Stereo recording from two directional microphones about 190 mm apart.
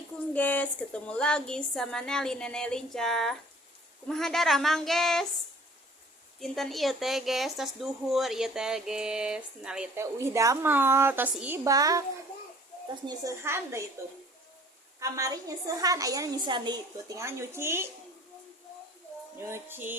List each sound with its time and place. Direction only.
0.3 s speech: 10° left (ahead or behind)
6.4 s speech: centre (ahead or behind); by 12.0 s 20° right (ahead or behind)
13.1 s a woman's voice: 15° right (ahead or behind)
14.9 s a woman's voice: 15° right (ahead or behind)
19.4 s a woman's voice: 15° right (ahead or behind)